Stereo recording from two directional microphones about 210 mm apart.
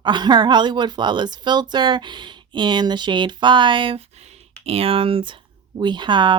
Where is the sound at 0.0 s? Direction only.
20° right (ahead or behind).